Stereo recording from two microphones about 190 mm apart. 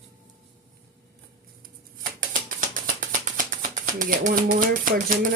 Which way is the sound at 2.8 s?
45° right (ahead or behind).